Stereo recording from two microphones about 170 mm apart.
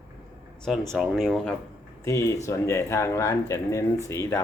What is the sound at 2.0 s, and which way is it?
Speech, 15° left (ahead or behind).